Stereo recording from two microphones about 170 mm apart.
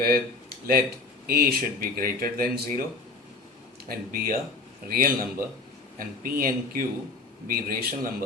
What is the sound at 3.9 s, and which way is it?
Speech, 60° right (ahead or behind).